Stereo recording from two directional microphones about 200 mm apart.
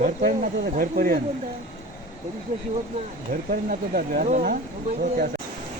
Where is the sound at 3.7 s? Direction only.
45° right (ahead or behind).